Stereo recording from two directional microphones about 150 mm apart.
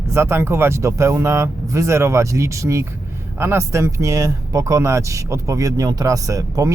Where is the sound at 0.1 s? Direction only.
15° right (ahead or behind).